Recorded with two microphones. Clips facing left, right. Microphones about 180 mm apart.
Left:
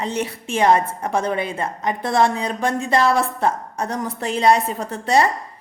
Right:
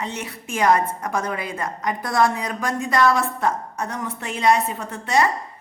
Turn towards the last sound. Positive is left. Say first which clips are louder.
# left 3 dB
turn(degrees=35)  # may be behind; listen again after turning